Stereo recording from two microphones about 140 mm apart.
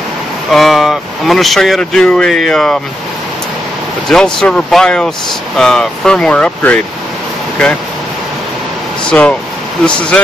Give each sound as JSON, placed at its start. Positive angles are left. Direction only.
{"t": 0.5, "sound": "speech", "side_deg": 0}
{"t": 4.1, "sound": "speech", "side_deg": 5}
{"t": 9.1, "sound": "speech", "side_deg": 5}